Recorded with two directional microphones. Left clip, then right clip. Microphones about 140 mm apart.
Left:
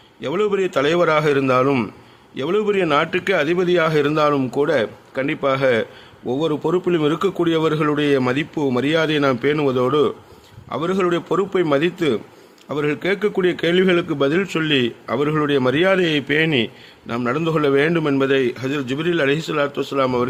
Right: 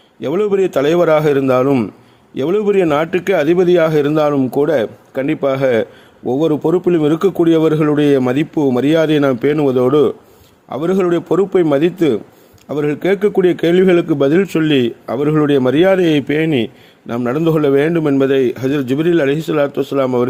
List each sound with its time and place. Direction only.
0.2 s a man's voice: 40° right (ahead or behind)